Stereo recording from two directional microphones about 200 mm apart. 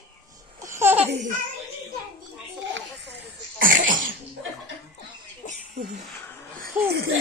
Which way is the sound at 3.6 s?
45° right (ahead or behind).